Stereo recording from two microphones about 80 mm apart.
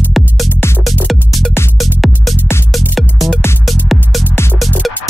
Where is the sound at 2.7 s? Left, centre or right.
Centre.